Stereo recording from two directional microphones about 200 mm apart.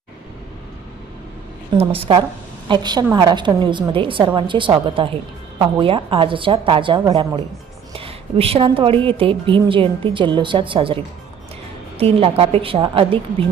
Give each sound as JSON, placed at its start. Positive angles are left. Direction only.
{"t": 1.7, "sound": "a woman's voice", "side_deg": -30}